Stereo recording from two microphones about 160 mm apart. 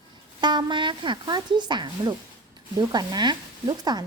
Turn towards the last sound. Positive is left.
turn(degrees=-25)  # may be behind; listen again after turning